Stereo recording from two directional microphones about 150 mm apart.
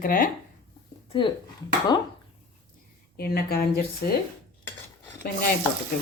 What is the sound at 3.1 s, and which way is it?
Speech, 90° left.